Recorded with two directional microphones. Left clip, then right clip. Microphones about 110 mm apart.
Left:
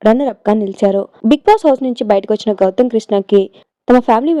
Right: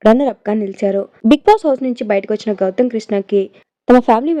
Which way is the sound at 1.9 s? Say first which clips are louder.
Left 3 dB; 55° left (ahead or behind).